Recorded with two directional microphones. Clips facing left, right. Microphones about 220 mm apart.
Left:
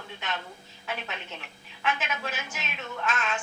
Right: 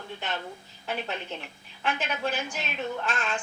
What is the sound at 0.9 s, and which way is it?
A woman's voice, 35° right (ahead or behind).